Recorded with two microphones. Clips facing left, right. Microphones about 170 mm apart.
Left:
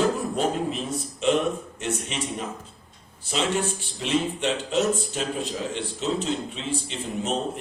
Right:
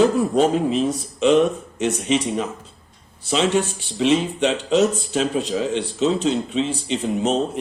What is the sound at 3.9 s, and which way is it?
Speech, 90° right.